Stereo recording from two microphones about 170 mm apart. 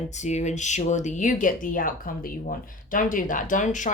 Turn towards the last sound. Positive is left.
turn(degrees=50)  # may be behind; listen again after turning